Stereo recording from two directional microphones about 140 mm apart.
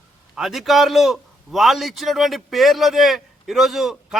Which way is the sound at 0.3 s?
Centre (ahead or behind).